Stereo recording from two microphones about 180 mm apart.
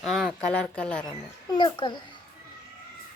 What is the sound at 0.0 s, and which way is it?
Speech, centre (ahead or behind).